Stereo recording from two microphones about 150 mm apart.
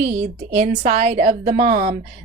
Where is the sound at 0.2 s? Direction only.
50° right (ahead or behind).